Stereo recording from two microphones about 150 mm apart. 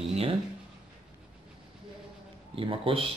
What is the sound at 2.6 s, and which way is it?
Speech, 35° right (ahead or behind).